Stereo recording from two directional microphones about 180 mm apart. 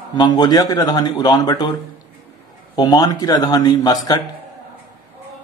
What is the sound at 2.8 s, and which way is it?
A man's voice, 20° left (ahead or behind).